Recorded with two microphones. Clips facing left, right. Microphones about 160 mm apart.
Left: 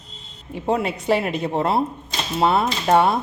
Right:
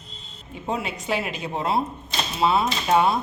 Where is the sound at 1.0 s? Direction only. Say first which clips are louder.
Left 7 dB; 55° left (ahead or behind).